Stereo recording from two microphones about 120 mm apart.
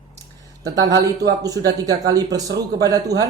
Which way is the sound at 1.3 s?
30° right (ahead or behind).